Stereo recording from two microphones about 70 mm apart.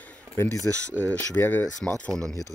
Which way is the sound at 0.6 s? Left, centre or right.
Right.